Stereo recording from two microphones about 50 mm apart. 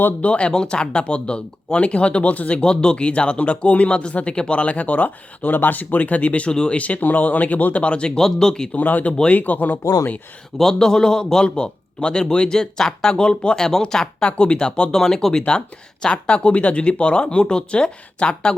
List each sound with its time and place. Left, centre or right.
0.2 s speech: left
2.6 s speech: centre
8.2 s a man's voice: centre
8.7 s speech: left
10.6 s a man's voice: centre
14.9 s a man's voice: centre